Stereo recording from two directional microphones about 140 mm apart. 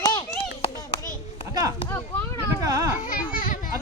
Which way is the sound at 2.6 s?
25° right (ahead or behind).